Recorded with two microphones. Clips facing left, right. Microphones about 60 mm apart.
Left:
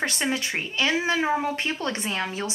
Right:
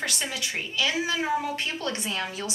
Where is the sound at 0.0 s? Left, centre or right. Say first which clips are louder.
Left 5 dB; left.